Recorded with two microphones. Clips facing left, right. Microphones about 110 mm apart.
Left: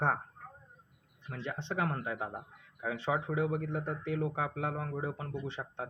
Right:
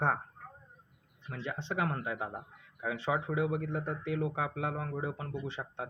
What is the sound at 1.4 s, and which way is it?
Speech, 35° left (ahead or behind).